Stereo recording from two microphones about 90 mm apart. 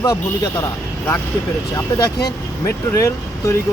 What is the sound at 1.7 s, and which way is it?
Speech, 45° left (ahead or behind).